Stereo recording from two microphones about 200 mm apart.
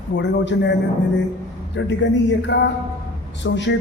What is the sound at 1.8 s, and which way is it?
Speech, 65° left (ahead or behind).